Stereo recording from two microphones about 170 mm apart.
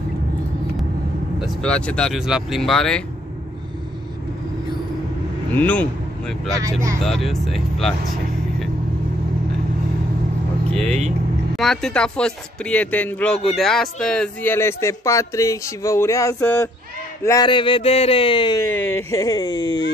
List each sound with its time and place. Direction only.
1.4 s speech: 5° left (ahead or behind)
5.5 s speech: 10° left (ahead or behind)
6.6 s speech: 20° right (ahead or behind)
7.2 s speech: centre (ahead or behind)
10.9 s speech: 40° right (ahead or behind)
11.5 s speech: centre (ahead or behind); by 18.7 s 25° left (ahead or behind)
18.7 s speech: 15° left (ahead or behind)